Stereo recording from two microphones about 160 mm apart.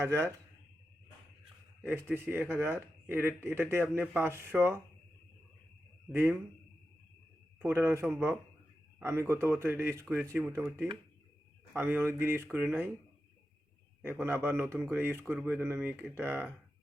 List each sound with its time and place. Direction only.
0.0 s a man's voice: 15° right (ahead or behind)
1.9 s a man's voice: 15° right (ahead or behind)
6.1 s a man's voice: 15° right (ahead or behind)
7.6 s a man's voice: 15° right (ahead or behind)
14.0 s a man's voice: 15° right (ahead or behind)